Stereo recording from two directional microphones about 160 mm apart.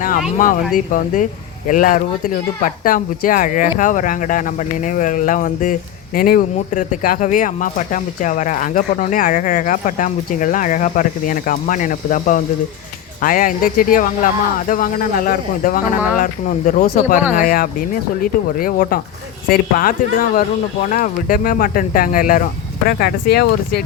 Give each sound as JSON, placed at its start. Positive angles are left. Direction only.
{"t": 0.3, "sound": "speech", "side_deg": 55}